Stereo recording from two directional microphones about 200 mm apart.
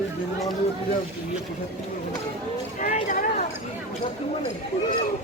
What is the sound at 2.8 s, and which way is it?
Speech, 40° left (ahead or behind).